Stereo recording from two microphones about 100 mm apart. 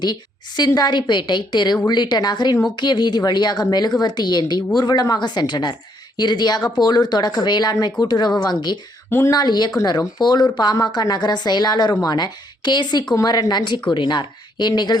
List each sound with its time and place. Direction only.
0.0 s a woman's voice: 45° left (ahead or behind)
9.0 s speech: 20° left (ahead or behind)
9.3 s a woman's voice: 45° left (ahead or behind)